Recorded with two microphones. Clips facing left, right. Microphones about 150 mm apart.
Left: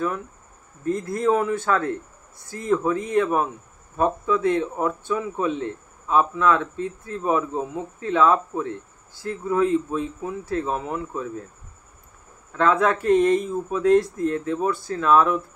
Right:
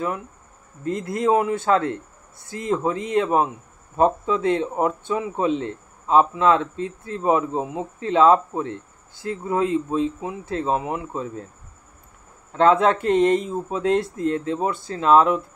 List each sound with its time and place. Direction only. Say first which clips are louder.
1.0 s a man's voice: right 2 dB; 15° right (ahead or behind)
12.5 s speech: right 3 dB; 25° right (ahead or behind)